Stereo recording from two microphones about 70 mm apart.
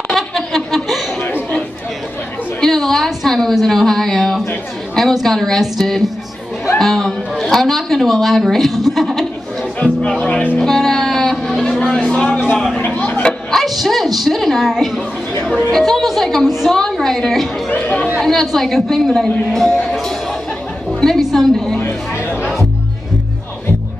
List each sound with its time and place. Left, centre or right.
0.1 s a sound: centre
2.6 s a woman's voice: centre
9.8 s speech: centre
10.6 s a sound: centre; by 13.2 s left
13.2 s a woman's voice: centre
17.6 s speech: left
18.2 s a woman's voice: centre
22.3 s music: centre